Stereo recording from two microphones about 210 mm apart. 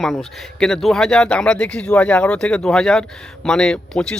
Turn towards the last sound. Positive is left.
turn(degrees=5)  # may be behind; listen again after turning